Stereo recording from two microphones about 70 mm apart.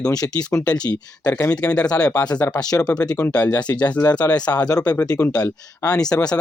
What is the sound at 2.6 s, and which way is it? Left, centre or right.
Speech, left.